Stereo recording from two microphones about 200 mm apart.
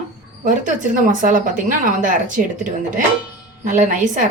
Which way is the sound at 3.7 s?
40° right (ahead or behind).